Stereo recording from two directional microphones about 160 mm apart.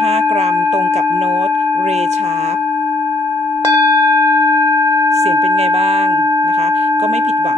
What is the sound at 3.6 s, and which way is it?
Singing bowl, 20° right (ahead or behind).